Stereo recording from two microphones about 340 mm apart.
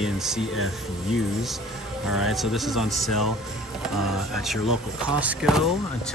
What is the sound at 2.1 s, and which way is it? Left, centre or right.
Speech, centre.